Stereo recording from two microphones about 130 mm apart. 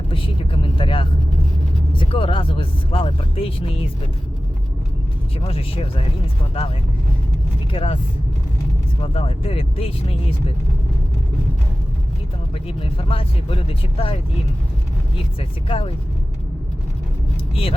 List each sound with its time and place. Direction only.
0.1 s vehicle: 45° left (ahead or behind)
1.9 s speech: 40° left (ahead or behind)
5.4 s speech: 50° left (ahead or behind)
9.0 s speech: 50° left (ahead or behind)
12.6 s speech: 45° left (ahead or behind)
15.4 s speech: 45° left (ahead or behind)
17.5 s speech: 45° left (ahead or behind)